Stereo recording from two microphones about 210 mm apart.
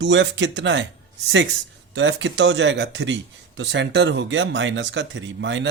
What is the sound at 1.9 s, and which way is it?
Speech, 60° right (ahead or behind).